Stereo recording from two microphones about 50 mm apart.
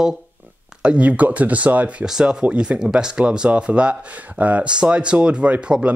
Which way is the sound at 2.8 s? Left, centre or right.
Centre.